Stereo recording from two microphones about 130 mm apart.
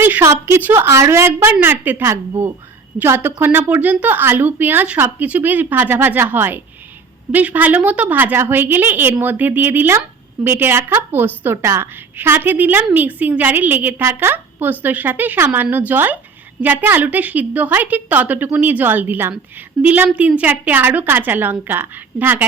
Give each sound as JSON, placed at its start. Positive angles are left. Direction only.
{"t": 0.0, "sound": "a woman's voice", "side_deg": -20}